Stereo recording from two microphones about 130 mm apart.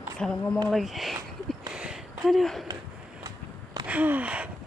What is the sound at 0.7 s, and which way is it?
Speech, centre (ahead or behind).